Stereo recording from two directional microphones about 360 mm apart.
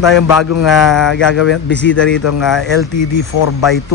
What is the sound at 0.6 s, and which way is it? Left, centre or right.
Speech, centre.